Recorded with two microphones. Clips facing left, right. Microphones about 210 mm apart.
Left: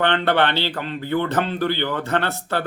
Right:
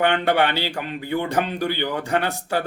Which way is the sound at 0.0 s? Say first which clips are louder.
Even; 10° right (ahead or behind).